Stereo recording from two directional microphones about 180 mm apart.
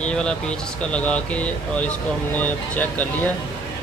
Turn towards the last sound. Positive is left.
turn(degrees=10)  # may be behind; listen again after turning